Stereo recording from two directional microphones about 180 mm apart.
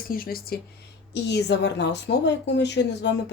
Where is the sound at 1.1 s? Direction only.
70° left (ahead or behind).